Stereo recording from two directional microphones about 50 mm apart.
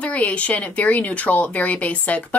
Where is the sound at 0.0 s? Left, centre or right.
Left.